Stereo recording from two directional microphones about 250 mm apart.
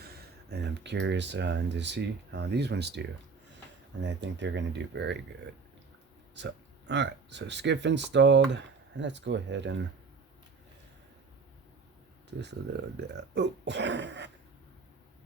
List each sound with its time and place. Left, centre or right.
0.0 s speech: right
4.0 s speech: right
6.3 s speech: right
12.4 s speech: right